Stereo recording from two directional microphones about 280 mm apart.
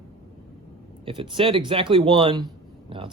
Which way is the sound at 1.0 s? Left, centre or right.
Centre.